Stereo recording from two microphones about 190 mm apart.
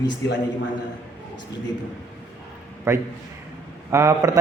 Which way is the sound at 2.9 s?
15° right (ahead or behind).